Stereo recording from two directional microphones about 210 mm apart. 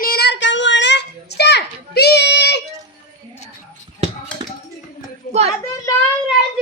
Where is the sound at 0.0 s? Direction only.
50° left (ahead or behind).